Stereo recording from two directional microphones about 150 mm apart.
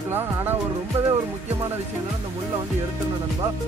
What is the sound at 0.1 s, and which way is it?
Music, 15° right (ahead or behind).